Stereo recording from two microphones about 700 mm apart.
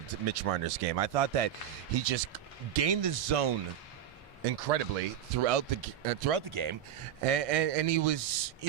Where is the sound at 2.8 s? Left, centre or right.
Right.